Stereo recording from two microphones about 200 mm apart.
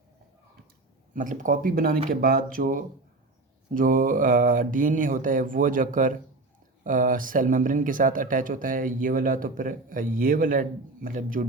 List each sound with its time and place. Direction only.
1.1 s speech: 40° right (ahead or behind)